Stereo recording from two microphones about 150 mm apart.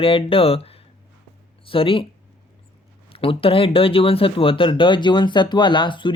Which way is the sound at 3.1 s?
40° left (ahead or behind).